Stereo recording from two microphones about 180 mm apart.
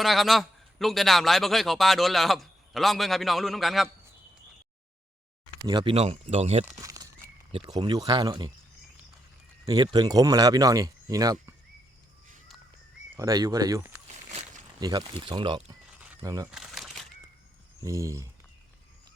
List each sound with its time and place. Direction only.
0.0 s a man's voice: centre (ahead or behind)
5.6 s speech: 25° right (ahead or behind)
6.7 s speech: 20° right (ahead or behind)
9.6 s speech: 25° right (ahead or behind)
13.1 s speech: 20° right (ahead or behind)
14.1 s a sound: 35° right (ahead or behind)
14.8 s speech: 20° right (ahead or behind)
16.5 s crumpling: 5° right (ahead or behind)
17.8 s speech: 15° right (ahead or behind)